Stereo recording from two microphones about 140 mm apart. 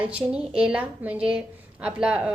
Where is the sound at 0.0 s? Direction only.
10° right (ahead or behind).